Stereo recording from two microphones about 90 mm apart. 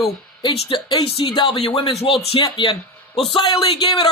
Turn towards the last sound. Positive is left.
turn(degrees=60)  # may be behind; listen again after turning